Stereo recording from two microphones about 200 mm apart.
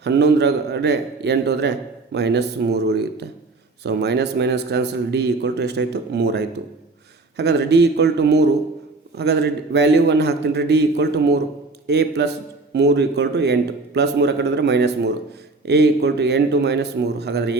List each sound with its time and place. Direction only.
0.0 s a man's voice: 55° right (ahead or behind)